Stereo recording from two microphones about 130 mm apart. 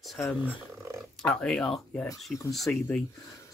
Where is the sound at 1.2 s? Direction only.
5° left (ahead or behind).